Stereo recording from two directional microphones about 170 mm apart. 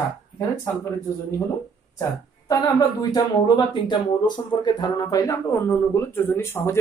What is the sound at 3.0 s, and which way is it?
Speech, 25° left (ahead or behind).